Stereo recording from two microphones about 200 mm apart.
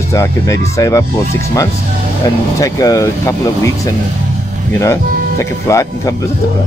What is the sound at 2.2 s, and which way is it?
Speech, 15° left (ahead or behind).